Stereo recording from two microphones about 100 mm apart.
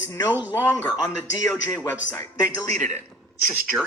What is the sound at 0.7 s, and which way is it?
Speech, 40° left (ahead or behind).